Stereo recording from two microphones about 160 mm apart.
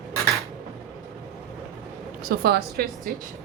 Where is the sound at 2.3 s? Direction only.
75° right (ahead or behind).